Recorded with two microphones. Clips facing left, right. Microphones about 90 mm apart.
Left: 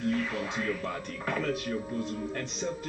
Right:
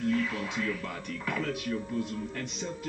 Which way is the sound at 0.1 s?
40° left (ahead or behind).